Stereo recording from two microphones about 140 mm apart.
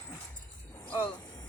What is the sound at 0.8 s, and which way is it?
Music, 5° left (ahead or behind).